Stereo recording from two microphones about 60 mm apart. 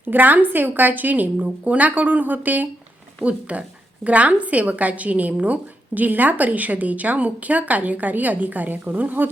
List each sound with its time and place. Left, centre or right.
0.0 s a woman's voice: right